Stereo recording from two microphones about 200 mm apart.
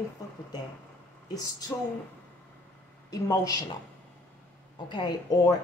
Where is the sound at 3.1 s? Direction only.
20° left (ahead or behind).